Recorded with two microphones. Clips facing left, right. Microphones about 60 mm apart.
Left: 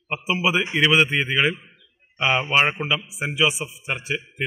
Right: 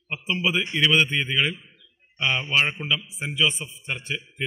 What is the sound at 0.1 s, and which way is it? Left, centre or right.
A man's voice, centre.